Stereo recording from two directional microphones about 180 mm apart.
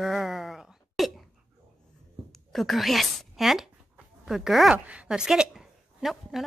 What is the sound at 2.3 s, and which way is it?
A woman's voice, centre (ahead or behind).